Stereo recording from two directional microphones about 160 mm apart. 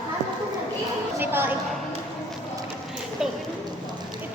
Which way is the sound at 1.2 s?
15° right (ahead or behind).